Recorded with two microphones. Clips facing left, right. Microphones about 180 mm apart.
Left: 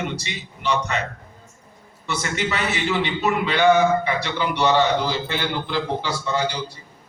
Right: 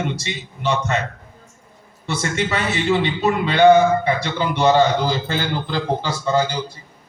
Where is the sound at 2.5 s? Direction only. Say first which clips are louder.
Right 4 dB; 45° right (ahead or behind).